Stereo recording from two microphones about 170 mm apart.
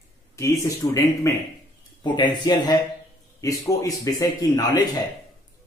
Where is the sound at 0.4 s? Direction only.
20° left (ahead or behind).